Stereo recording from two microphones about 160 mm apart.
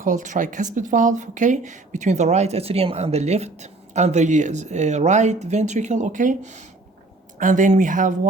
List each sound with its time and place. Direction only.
0.0 s speech: 50° right (ahead or behind)